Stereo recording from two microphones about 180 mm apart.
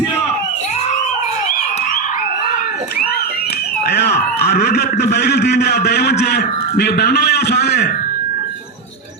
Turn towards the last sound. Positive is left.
turn(degrees=65)  # may be behind; listen again after turning